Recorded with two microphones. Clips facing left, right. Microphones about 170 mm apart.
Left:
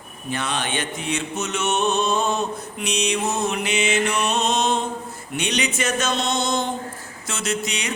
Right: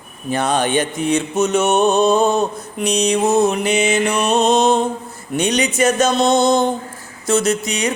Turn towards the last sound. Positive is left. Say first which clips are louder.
# right 7 dB
turn(degrees=-40)  # may be behind; listen again after turning